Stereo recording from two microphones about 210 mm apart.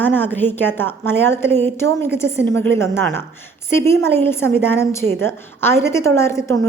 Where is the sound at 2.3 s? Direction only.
55° right (ahead or behind).